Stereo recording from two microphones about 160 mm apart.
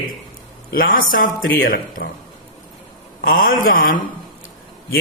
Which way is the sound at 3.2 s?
60° left (ahead or behind).